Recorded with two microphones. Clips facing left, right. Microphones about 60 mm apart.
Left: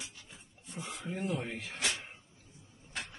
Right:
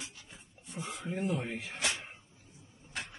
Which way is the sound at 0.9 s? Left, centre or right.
Centre.